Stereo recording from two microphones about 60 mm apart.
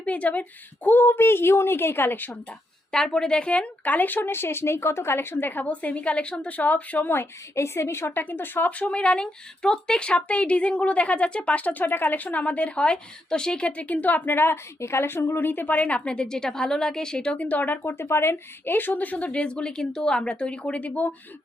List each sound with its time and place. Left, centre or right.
0.0 s a woman's voice: left
0.9 s speech: left
2.9 s speech: centre; by 8.2 s left
8.2 s speech: left
16.0 s speech: centre